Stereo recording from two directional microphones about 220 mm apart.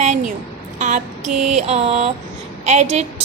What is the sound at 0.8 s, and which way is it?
A woman's voice, 35° right (ahead or behind).